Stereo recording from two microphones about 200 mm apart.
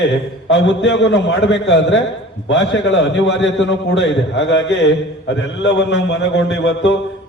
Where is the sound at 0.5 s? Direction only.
65° left (ahead or behind).